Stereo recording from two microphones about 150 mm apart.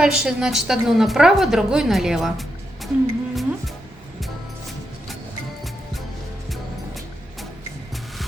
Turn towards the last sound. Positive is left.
turn(degrees=0)  # may be behind; listen again after turning